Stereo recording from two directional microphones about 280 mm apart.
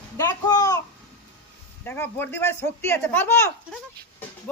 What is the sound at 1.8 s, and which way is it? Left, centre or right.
Speech, centre.